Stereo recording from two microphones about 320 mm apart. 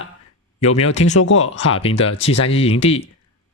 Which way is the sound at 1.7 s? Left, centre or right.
Centre.